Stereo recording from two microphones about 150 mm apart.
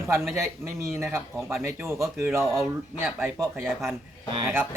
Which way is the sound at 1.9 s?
20° right (ahead or behind).